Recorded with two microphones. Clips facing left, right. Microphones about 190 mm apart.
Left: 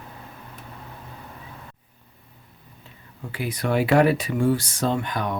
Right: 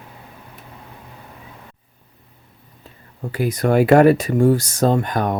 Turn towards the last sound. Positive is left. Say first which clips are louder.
# right 6 dB
turn(degrees=-45)  # may be behind; listen again after turning